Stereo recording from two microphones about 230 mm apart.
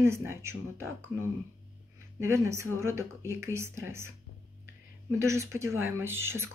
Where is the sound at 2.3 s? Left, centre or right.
Centre.